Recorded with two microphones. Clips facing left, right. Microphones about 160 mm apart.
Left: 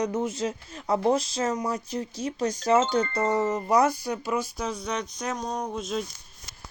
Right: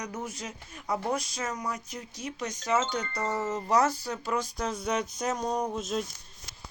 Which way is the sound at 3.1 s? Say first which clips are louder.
Left 6 dB; 20° left (ahead or behind).